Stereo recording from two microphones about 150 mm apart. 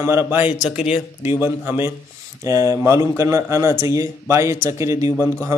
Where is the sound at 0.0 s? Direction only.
15° right (ahead or behind).